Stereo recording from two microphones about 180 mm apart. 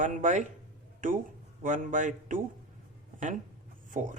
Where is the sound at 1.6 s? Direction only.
45° right (ahead or behind).